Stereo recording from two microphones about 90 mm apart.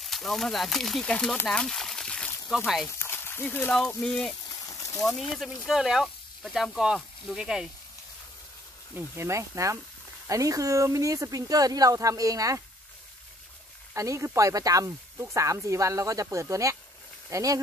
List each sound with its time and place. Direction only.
0.0 s speech: centre (ahead or behind)
1.5 s a sound: 5° left (ahead or behind)
2.5 s speech: centre (ahead or behind)
3.0 s a sound: 25° left (ahead or behind)
3.7 s speech: 10° left (ahead or behind)
5.4 s speech: 5° right (ahead or behind)
8.9 s speech: 30° right (ahead or behind)
13.9 s speech: 35° right (ahead or behind)